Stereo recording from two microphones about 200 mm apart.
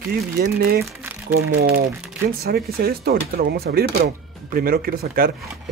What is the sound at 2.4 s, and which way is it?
Speech, 50° right (ahead or behind).